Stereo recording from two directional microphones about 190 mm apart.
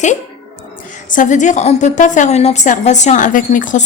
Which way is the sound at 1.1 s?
40° left (ahead or behind).